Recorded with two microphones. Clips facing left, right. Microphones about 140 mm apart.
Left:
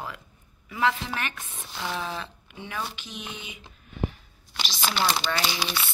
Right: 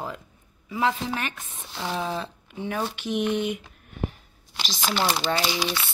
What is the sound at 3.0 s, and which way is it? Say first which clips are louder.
Speech: right 15 dB; 65° right (ahead or behind).